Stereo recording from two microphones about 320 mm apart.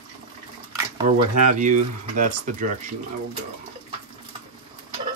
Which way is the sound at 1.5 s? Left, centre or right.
Right.